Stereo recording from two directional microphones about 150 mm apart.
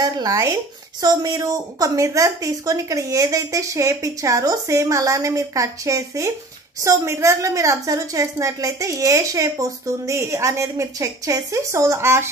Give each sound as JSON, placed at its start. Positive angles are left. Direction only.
{"t": 0.0, "sound": "a woman's voice", "side_deg": -25}